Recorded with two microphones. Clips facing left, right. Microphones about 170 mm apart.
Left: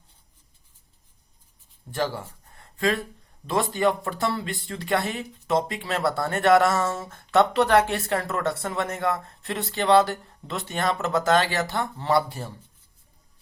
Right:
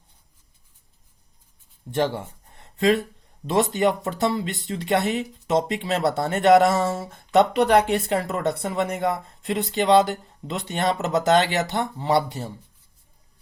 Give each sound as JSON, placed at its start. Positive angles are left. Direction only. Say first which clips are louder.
{"t": 1.9, "sound": "speech", "louder": "right 4 dB", "side_deg": -20}